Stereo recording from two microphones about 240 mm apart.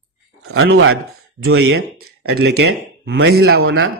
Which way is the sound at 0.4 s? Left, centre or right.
Right.